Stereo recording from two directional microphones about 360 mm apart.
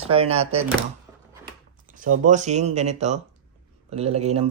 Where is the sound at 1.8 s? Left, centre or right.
Right.